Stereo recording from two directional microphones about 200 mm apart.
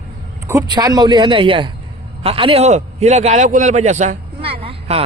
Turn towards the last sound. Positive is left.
turn(degrees=-30)  # may be behind; listen again after turning